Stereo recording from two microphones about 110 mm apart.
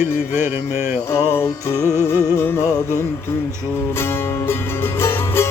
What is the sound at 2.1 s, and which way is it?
Music, 20° left (ahead or behind).